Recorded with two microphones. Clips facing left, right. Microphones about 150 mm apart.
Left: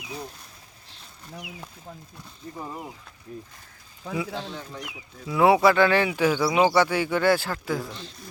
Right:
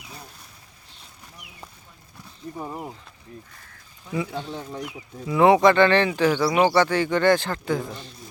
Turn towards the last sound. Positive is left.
turn(degrees=0)  # may be behind; listen again after turning